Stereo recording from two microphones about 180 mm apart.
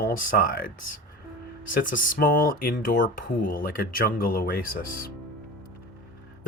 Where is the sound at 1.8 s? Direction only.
50° left (ahead or behind).